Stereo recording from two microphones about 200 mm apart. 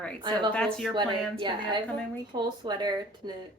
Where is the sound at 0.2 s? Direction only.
25° right (ahead or behind).